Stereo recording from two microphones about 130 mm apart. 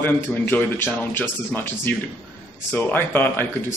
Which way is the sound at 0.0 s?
15° left (ahead or behind).